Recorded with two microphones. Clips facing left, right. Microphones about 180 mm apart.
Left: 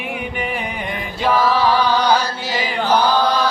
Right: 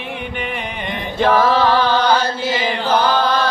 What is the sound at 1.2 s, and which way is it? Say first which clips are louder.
Music: right 3 dB; 50° right (ahead or behind).